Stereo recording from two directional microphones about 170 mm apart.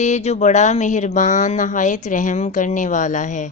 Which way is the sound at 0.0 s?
40° left (ahead or behind).